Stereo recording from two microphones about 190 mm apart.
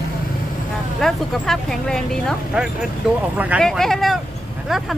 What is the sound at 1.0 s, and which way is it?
Speech, 5° left (ahead or behind).